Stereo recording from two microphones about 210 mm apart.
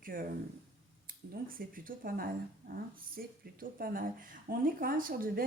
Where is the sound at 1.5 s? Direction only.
40° right (ahead or behind).